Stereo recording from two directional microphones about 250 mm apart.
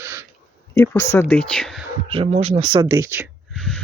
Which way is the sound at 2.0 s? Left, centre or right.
Right.